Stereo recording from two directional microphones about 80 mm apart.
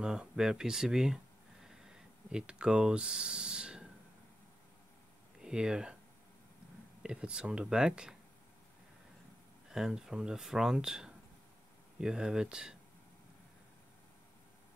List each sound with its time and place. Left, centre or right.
0.0 s speech: centre
5.4 s speech: centre
7.0 s speech: centre
9.7 s speech: centre